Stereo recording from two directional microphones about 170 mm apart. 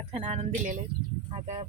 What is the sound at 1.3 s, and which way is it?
Speech, 30° right (ahead or behind).